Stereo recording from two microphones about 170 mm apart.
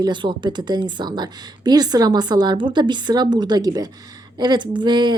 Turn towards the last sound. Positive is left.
turn(degrees=-25)  # may be behind; listen again after turning